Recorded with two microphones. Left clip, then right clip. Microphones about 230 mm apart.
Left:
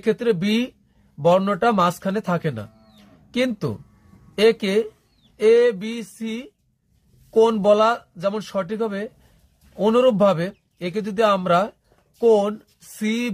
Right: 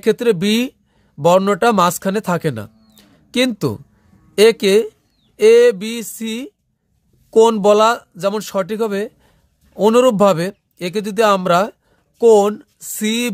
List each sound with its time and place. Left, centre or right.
0.0 s speech: right